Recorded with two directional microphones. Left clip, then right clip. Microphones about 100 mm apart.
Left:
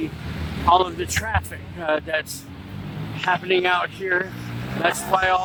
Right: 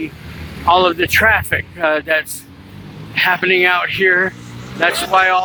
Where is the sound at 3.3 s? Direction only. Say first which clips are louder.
Right 6 dB; 35° right (ahead or behind).